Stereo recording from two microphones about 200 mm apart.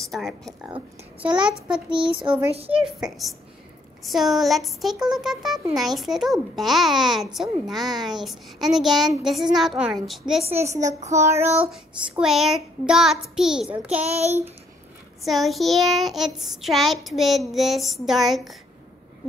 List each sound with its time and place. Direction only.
0.0 s a child's voice: centre (ahead or behind)
0.5 s a child's voice: 15° right (ahead or behind)
1.9 s child singing: 25° right (ahead or behind)
2.8 s a child's voice: centre (ahead or behind)
11.1 s a child's voice: 15° right (ahead or behind)
11.7 s a child's voice: centre (ahead or behind)
14.0 s child singing: 30° right (ahead or behind)
15.2 s a child's voice: centre (ahead or behind)